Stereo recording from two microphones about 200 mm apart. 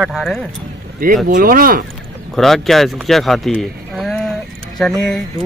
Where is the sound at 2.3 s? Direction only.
Centre (ahead or behind).